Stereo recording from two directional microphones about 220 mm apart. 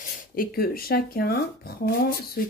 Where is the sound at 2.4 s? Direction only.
40° left (ahead or behind).